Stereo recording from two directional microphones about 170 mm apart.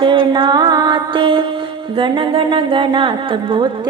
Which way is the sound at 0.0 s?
30° right (ahead or behind).